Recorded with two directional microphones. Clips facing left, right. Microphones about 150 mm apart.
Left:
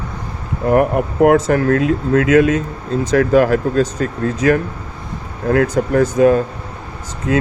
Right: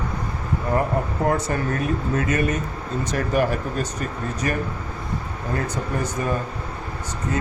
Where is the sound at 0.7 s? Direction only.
75° left (ahead or behind).